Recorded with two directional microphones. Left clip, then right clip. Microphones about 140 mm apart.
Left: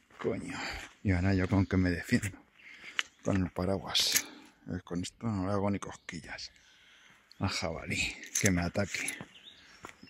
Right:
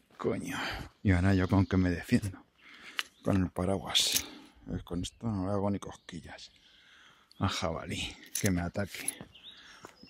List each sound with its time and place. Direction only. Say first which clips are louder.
0.2 s speech: right 2 dB; 25° right (ahead or behind)
3.0 s a sound: left 2 dB; 55° right (ahead or behind)
3.5 s speech: right 1 dB; 20° right (ahead or behind)
7.3 s speech: right 2 dB; 25° right (ahead or behind)
7.9 s speech: left 5 dB; 5° right (ahead or behind)
8.4 s speech: left 3 dB; 10° left (ahead or behind)